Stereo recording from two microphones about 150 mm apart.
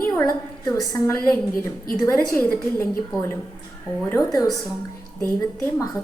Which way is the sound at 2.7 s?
20° left (ahead or behind).